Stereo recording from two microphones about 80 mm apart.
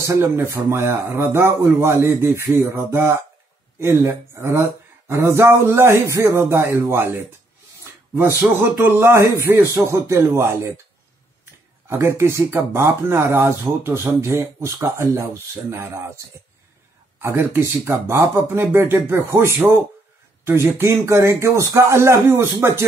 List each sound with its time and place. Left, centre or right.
0.0 s speech: right
8.4 s speech: right
11.9 s speech: right